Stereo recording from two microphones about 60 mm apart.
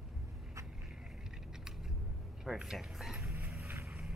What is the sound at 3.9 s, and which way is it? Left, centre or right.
Music, centre.